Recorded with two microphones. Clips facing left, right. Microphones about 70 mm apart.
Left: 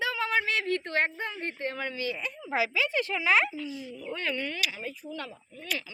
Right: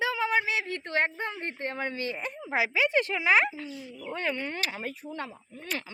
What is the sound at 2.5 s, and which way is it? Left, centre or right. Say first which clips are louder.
Speech: right 2 dB; right.